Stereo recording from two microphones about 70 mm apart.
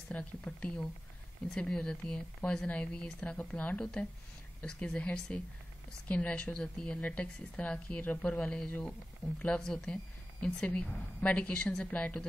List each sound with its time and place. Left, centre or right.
0.1 s a woman's voice: centre